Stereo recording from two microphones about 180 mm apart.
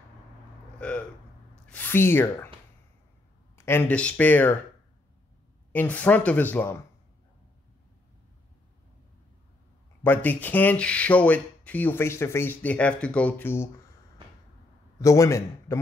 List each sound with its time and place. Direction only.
0.7 s a sound: 5° left (ahead or behind)
1.7 s speech: 10° left (ahead or behind)
3.5 s speech: 10° left (ahead or behind)
5.7 s speech: 10° left (ahead or behind)
10.0 s speech: 10° left (ahead or behind)
15.0 s speech: 15° left (ahead or behind)